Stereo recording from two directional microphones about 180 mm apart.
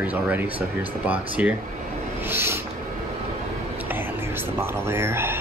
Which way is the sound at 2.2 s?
10° right (ahead or behind).